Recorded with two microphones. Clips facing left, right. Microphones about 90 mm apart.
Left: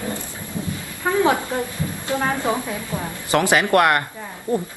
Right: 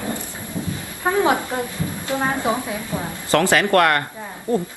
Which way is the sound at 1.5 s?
20° right (ahead or behind).